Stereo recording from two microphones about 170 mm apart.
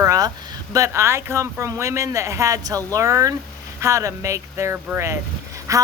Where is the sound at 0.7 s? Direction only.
15° right (ahead or behind).